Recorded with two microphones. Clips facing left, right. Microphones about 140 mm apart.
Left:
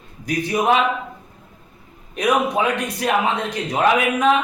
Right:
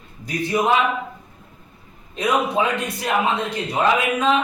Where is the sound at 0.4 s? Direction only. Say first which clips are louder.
Even; 15° left (ahead or behind).